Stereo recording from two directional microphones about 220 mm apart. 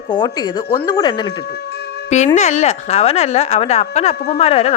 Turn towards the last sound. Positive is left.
turn(degrees=30)  # may be behind; listen again after turning